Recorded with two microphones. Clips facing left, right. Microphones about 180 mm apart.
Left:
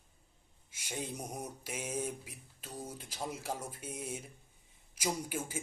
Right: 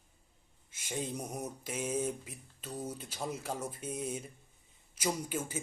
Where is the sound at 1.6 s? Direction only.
10° left (ahead or behind).